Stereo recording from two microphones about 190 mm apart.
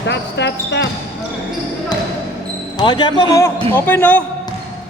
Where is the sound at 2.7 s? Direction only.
25° left (ahead or behind).